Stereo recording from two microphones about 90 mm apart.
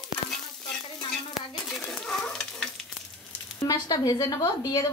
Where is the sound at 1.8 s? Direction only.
5° left (ahead or behind).